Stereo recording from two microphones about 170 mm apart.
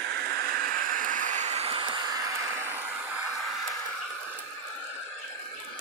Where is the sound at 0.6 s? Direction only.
55° right (ahead or behind); by 2.2 s 30° right (ahead or behind).